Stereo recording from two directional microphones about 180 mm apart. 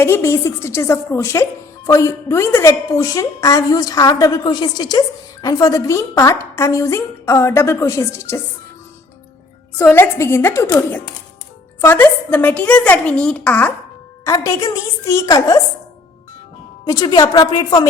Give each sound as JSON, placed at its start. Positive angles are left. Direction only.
{"t": 0.0, "sound": "a woman's voice", "side_deg": 15}
{"t": 9.7, "sound": "a woman's voice", "side_deg": 10}
{"t": 16.8, "sound": "a woman's voice", "side_deg": 20}